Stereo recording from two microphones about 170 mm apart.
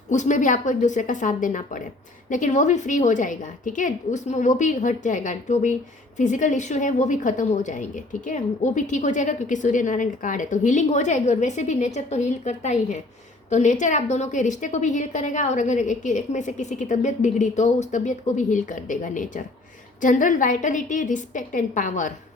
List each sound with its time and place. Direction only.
0.1 s a woman's voice: 45° left (ahead or behind)